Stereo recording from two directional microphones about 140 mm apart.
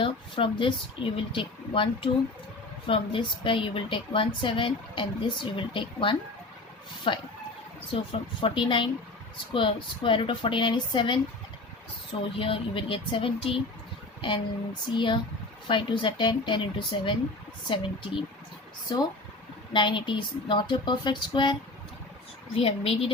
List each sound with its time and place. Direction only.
0.0 s a woman's voice: 35° left (ahead or behind)
12.4 s a woman's voice: 40° left (ahead or behind)
22.5 s speech: 45° left (ahead or behind)